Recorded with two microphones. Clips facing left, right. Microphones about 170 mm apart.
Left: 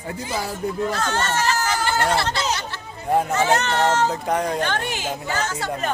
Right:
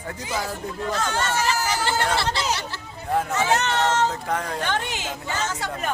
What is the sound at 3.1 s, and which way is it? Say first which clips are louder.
Speech: left 3 dB; 15° left (ahead or behind).